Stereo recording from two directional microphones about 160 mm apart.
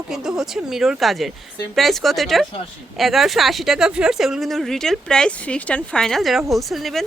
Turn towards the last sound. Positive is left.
turn(degrees=0)  # may be behind; listen again after turning